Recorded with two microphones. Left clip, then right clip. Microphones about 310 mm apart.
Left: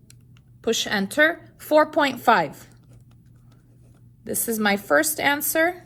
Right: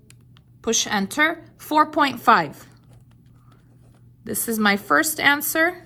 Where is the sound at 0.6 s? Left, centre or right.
Right.